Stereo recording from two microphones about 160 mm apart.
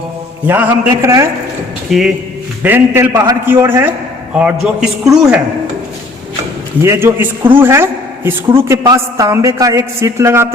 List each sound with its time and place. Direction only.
0.4 s a man's voice: 10° right (ahead or behind)
1.9 s a man's voice: centre (ahead or behind)
2.6 s a man's voice: 15° right (ahead or behind)
6.8 s a man's voice: 15° right (ahead or behind)